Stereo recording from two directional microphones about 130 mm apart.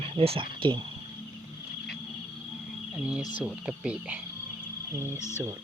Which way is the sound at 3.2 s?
80° left.